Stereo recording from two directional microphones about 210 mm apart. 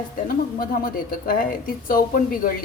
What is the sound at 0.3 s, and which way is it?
A woman's voice, 45° left (ahead or behind).